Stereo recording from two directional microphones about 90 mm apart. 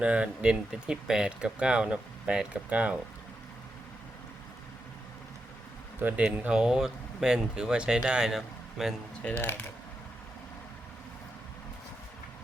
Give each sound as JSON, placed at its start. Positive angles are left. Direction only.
{"t": 0.0, "sound": "speech", "side_deg": -15}
{"t": 6.0, "sound": "speech", "side_deg": -20}
{"t": 9.4, "sound": "speech", "side_deg": 20}